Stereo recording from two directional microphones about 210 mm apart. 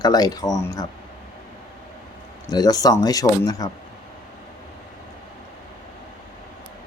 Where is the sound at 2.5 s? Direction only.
20° left (ahead or behind).